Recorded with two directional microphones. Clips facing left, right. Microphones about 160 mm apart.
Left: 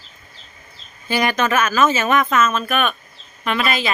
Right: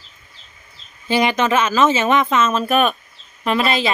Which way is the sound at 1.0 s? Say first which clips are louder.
Right 2 dB; 25° right (ahead or behind).